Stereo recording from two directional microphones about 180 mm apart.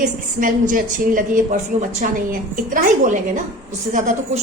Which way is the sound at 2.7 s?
45° right (ahead or behind).